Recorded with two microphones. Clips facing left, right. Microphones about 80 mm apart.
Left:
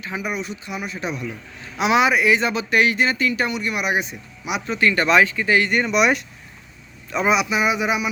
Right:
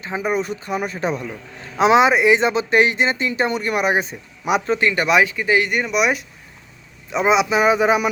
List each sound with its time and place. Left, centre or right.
0.0 s a man's voice: right
3.6 s speech: right
4.8 s speech: centre
7.1 s speech: right